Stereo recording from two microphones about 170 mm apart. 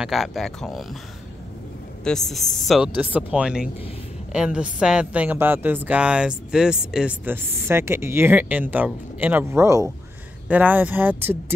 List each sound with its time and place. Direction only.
0.0 s speech: centre (ahead or behind)
2.0 s a woman's voice: centre (ahead or behind)